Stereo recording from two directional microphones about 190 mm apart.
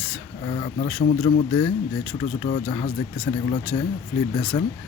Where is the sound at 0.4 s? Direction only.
30° left (ahead or behind).